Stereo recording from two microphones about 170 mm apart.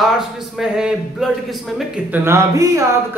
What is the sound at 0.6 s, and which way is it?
Speech, 5° right (ahead or behind).